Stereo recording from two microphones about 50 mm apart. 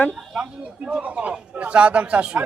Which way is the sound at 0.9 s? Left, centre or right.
Right.